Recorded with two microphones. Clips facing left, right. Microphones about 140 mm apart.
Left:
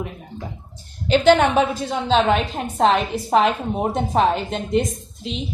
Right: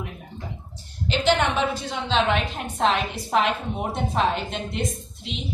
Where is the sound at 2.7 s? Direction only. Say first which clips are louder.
Left 5 dB; 40° left (ahead or behind).